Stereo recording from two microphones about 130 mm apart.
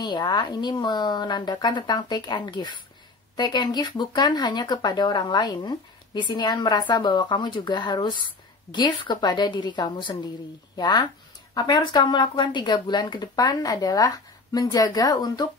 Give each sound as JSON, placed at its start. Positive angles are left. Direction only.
{"t": 0.0, "sound": "speech", "side_deg": 35}